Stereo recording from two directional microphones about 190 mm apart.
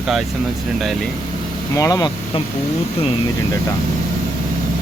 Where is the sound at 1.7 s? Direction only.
20° left (ahead or behind).